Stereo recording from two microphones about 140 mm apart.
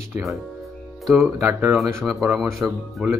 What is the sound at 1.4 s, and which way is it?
Speech, 20° right (ahead or behind).